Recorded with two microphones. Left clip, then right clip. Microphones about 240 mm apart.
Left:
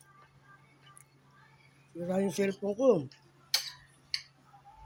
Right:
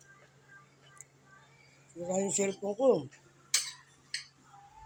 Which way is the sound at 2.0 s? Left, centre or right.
Left.